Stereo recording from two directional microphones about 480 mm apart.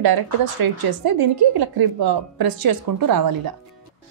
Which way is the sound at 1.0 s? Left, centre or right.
Right.